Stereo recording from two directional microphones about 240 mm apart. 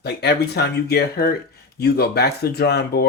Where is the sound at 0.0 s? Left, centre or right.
Left.